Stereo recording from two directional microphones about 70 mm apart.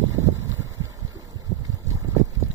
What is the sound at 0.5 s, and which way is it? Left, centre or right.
Vehicle, right.